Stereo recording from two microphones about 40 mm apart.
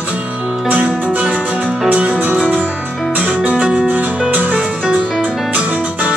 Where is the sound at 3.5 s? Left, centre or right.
Right.